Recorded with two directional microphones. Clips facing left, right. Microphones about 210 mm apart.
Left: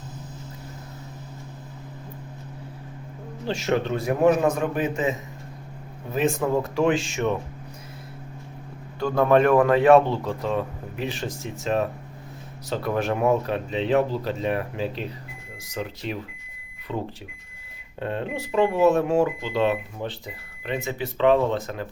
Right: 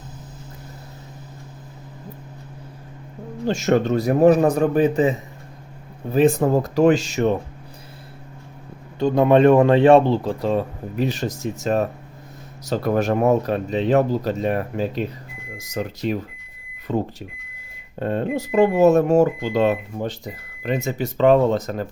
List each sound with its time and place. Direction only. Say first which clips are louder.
3.4 s speech: right 5 dB; 45° right (ahead or behind)
9.0 s speech: right 4 dB; 20° right (ahead or behind); by 21.8 s 40° right (ahead or behind)